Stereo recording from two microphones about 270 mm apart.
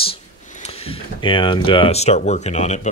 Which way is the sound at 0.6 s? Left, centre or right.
Left.